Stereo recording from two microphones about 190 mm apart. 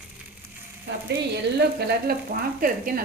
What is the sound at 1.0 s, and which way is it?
Speech, 60° right (ahead or behind).